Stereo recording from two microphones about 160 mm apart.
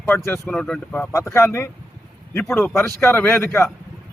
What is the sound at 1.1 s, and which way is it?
A man's voice, 15° left (ahead or behind).